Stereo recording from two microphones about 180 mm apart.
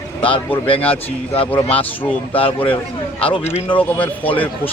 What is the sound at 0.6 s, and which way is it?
Speech, 30° left (ahead or behind).